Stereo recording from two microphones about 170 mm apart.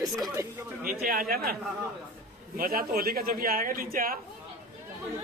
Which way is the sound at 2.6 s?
60° right (ahead or behind).